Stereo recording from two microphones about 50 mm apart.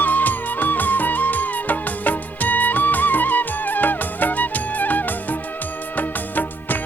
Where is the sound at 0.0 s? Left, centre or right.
Left.